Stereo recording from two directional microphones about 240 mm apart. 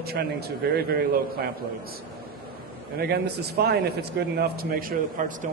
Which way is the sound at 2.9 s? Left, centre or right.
Right.